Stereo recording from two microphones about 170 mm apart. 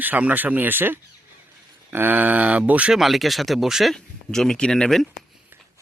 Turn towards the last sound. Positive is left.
turn(degrees=5)  # may be behind; listen again after turning